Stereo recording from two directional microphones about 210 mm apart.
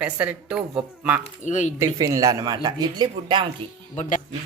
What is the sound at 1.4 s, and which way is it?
Speech, 35° left (ahead or behind).